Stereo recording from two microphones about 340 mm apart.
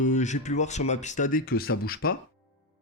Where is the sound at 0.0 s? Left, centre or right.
Left.